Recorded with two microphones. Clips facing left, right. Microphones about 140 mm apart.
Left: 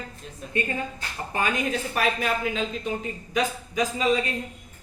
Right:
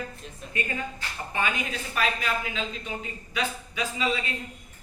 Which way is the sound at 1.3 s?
40° left (ahead or behind).